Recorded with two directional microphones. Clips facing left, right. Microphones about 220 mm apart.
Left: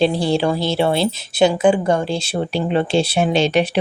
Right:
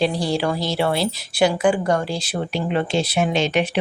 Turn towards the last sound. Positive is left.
turn(degrees=35)  # may be behind; listen again after turning